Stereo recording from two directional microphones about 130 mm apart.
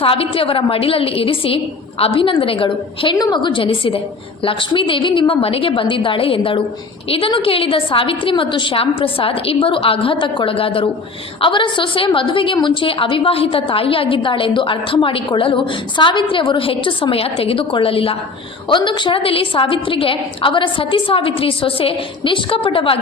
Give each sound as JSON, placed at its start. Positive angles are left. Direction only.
{"t": 0.0, "sound": "a woman's voice", "side_deg": 45}